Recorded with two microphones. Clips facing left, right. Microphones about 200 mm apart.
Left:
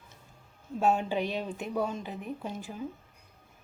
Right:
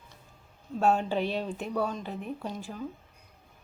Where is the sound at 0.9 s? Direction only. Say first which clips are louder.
Right 1 dB; 15° left (ahead or behind).